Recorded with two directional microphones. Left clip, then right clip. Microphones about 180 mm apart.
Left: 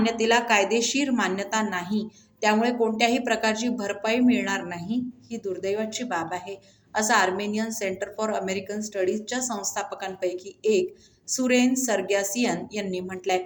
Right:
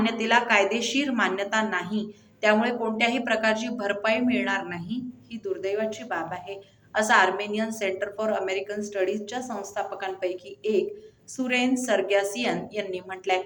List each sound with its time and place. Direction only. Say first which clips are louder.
0.0 s a woman's voice: left 1 dB; 45° left (ahead or behind)